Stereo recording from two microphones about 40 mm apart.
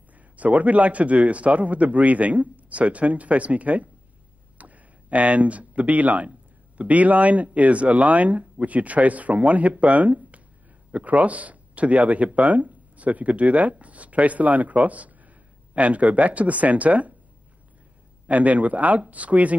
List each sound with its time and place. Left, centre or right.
0.4 s speech: right
18.2 s speech: right